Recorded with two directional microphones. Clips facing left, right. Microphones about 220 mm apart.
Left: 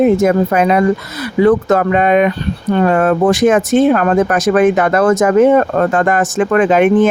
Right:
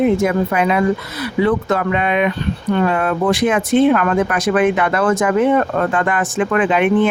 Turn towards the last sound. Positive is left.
turn(degrees=45)  # may be behind; listen again after turning